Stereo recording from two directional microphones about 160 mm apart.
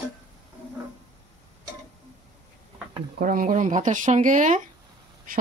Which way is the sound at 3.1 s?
60° right (ahead or behind).